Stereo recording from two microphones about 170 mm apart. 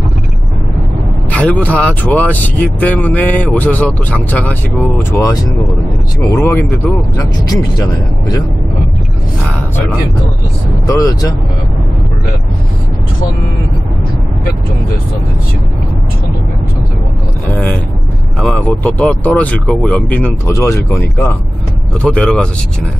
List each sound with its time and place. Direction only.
1.3 s speech: 10° left (ahead or behind)
11.0 s speech: 20° left (ahead or behind)
18.4 s speech: 5° left (ahead or behind)